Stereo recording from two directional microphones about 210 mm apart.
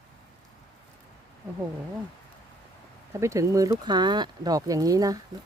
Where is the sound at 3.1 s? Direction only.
15° right (ahead or behind).